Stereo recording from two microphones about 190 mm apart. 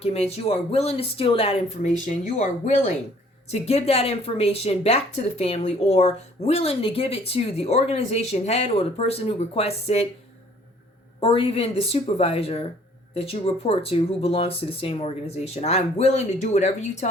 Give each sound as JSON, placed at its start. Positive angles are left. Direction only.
{"t": 0.0, "sound": "speech", "side_deg": 30}
{"t": 11.2, "sound": "speech", "side_deg": 30}